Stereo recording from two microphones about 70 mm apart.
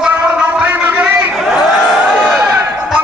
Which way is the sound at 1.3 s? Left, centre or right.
Centre.